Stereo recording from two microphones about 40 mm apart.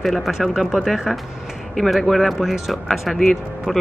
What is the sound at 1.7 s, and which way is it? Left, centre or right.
Speech, centre.